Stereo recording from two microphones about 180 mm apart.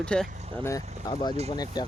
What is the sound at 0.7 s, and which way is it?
Speech, 20° left (ahead or behind).